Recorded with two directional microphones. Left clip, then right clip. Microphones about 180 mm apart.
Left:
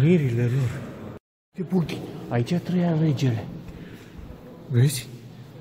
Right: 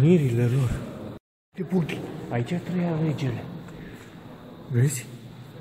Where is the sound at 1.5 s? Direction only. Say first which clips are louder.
Even; 15° left (ahead or behind).